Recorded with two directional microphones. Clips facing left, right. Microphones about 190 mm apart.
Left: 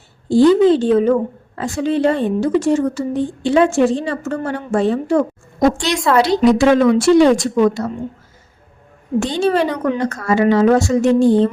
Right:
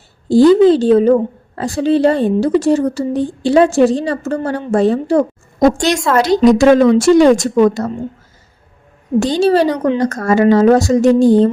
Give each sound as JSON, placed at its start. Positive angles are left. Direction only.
{"t": 0.3, "sound": "a woman's voice", "side_deg": -40}
{"t": 9.2, "sound": "a woman's voice", "side_deg": -35}
{"t": 10.1, "sound": "a woman's voice", "side_deg": -45}